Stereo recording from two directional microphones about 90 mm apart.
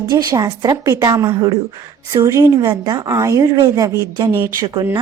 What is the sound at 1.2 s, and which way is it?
Speech, 30° right (ahead or behind).